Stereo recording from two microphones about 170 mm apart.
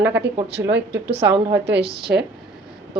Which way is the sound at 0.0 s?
10° right (ahead or behind).